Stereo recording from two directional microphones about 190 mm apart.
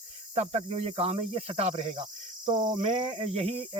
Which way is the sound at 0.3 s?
35° right (ahead or behind).